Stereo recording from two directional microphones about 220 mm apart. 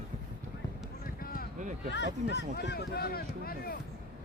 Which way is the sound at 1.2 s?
40° left (ahead or behind).